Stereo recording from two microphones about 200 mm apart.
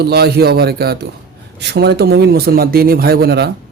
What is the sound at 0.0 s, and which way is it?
A man's voice, 55° right (ahead or behind).